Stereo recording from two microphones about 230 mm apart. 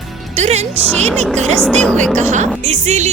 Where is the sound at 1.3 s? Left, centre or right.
Right.